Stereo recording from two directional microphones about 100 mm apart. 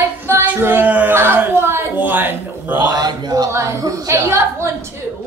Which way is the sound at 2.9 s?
45° right (ahead or behind).